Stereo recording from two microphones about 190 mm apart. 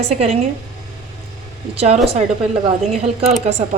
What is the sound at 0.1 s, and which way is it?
Speech, 35° right (ahead or behind).